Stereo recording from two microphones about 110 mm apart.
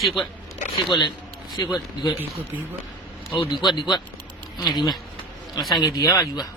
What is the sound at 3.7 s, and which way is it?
Speech, 40° left (ahead or behind).